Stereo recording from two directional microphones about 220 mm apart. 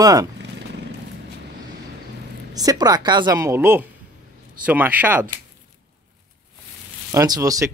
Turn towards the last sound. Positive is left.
turn(degrees=-15)  # may be behind; listen again after turning